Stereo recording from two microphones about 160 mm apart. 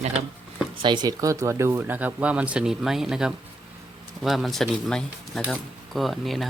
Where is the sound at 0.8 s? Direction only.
30° right (ahead or behind).